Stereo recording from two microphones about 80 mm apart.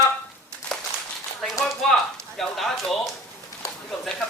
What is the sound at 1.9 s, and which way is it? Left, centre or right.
Speech, centre.